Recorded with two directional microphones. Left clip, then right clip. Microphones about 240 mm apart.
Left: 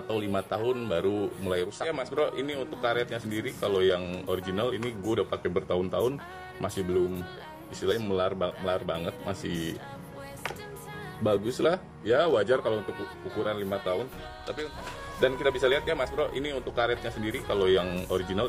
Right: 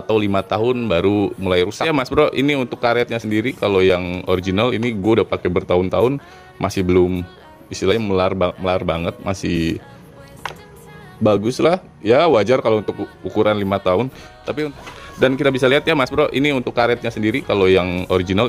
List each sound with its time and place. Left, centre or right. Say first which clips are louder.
0.1 s speech: right 12 dB; right
11.2 s speech: right 10 dB; right
15.1 s speech: right 10 dB; right